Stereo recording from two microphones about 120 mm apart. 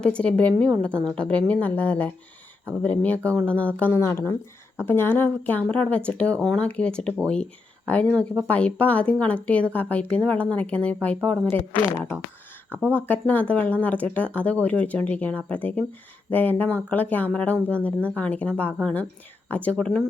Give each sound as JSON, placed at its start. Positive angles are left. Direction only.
{"t": 0.0, "sound": "speech", "side_deg": 10}
{"t": 12.7, "sound": "speech", "side_deg": -15}
{"t": 13.1, "sound": "speech", "side_deg": 15}